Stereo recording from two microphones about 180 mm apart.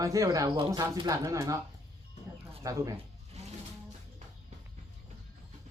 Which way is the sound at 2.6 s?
20° right (ahead or behind).